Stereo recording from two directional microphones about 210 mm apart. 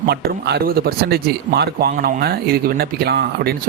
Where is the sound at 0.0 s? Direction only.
50° right (ahead or behind).